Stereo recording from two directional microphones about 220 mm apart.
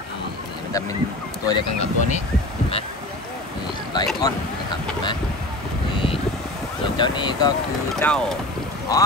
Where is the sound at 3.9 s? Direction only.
20° left (ahead or behind).